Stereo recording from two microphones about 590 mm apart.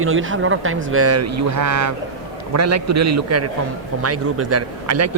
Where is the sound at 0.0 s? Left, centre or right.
Centre.